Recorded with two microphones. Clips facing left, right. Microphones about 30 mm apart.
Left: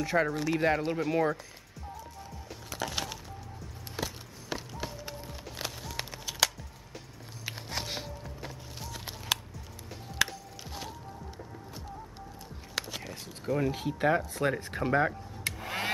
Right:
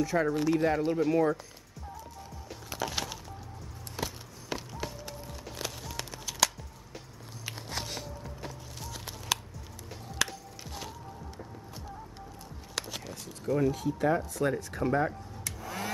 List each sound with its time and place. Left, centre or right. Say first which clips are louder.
0.0 s speech: even; left
0.3 s speech: right 3 dB; centre
0.6 s speech: right 1 dB; left
2.7 s wood: right 1 dB; centre
4.0 s music: right 1 dB; centre
5.0 s music: left 1 dB; centre
5.4 s music: right 1 dB; centre
5.9 s a sound: even; centre
10.1 s music: left 2 dB; centre
12.7 s a sound: left 1 dB; centre
13.0 s a sound: right 1 dB; left
13.7 s speech: even; left